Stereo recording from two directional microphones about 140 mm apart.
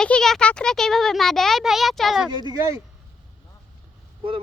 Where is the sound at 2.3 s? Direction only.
30° right (ahead or behind).